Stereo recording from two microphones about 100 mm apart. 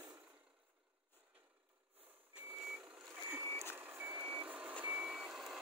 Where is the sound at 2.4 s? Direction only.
10° right (ahead or behind).